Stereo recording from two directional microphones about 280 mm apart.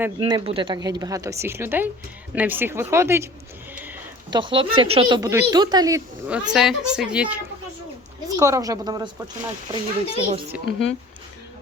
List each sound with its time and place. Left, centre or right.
0.2 s speech: centre